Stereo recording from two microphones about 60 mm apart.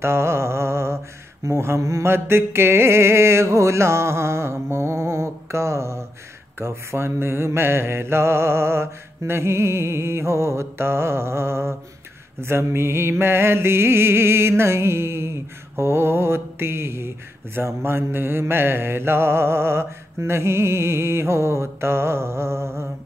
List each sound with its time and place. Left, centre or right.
0.0 s humming: right
1.4 s mantra: right